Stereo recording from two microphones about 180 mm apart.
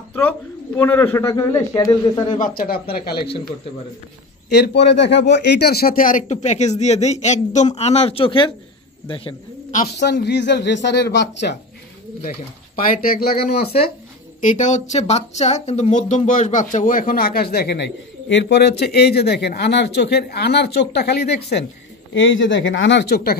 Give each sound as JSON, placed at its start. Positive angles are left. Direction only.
{"t": 0.1, "sound": "speech", "side_deg": 10}
{"t": 2.3, "sound": "a man's voice", "side_deg": 50}
{"t": 4.5, "sound": "speech", "side_deg": 70}
{"t": 9.7, "sound": "a sound", "side_deg": 45}
{"t": 9.9, "sound": "speech", "side_deg": 70}
{"t": 12.8, "sound": "a man's voice", "side_deg": 55}
{"t": 14.4, "sound": "a man's voice", "side_deg": 45}
{"t": 22.1, "sound": "speech", "side_deg": 90}